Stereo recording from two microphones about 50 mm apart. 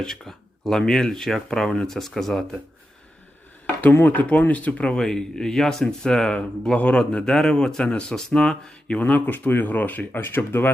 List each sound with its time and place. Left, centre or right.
0.0 s speech: centre
4.0 s speech: left
4.8 s speech: centre
6.7 s a man's voice: left
7.3 s speech: centre
8.9 s speech: left